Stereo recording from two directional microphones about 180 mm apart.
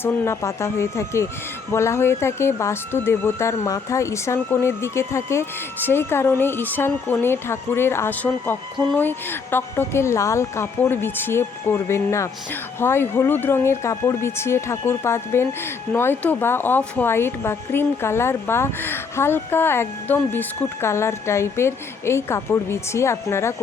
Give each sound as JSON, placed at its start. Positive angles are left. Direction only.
{"t": 0.0, "sound": "speech", "side_deg": 15}